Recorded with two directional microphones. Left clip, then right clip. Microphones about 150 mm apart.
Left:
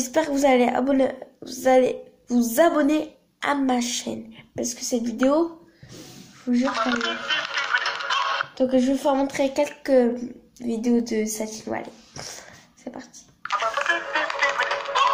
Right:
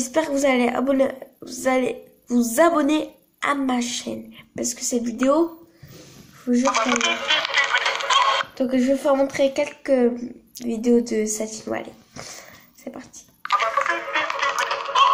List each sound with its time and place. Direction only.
0.0 s a woman's voice: centre (ahead or behind)
4.6 s a woman's voice: 10° right (ahead or behind)
6.7 s honk: 50° right (ahead or behind)
8.5 s a woman's voice: 5° right (ahead or behind)
13.4 s telephone dialing: 35° right (ahead or behind)
13.7 s music: 5° left (ahead or behind)